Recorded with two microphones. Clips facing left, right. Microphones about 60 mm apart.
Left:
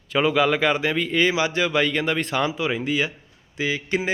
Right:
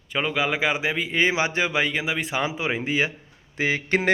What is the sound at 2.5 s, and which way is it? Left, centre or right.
Speech, right.